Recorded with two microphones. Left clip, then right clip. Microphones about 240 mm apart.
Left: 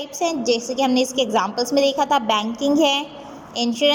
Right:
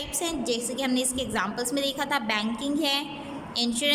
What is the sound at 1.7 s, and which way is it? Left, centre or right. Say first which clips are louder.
Speech: left 12 dB; right.